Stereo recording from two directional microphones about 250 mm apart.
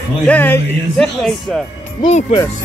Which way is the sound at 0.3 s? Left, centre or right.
Centre.